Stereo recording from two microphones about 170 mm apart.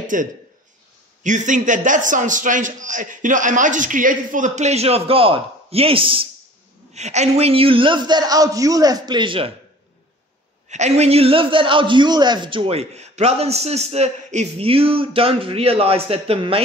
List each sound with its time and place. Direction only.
0.1 s a man's voice: 50° right (ahead or behind); by 9.5 s 30° right (ahead or behind)
10.7 s a man's voice: 40° right (ahead or behind)